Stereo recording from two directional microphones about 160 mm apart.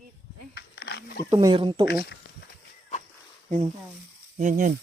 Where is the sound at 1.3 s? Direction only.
30° right (ahead or behind).